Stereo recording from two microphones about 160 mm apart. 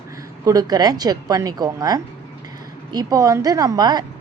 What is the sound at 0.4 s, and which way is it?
A woman's voice, 25° right (ahead or behind).